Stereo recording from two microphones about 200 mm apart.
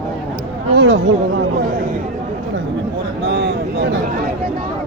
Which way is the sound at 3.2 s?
55° right (ahead or behind).